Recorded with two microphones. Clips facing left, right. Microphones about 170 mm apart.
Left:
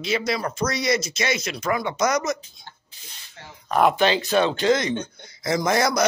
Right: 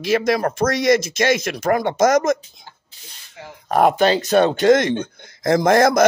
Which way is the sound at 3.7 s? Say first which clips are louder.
Right 4 dB; 45° right (ahead or behind).